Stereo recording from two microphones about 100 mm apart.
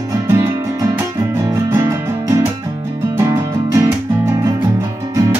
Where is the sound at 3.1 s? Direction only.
30° right (ahead or behind).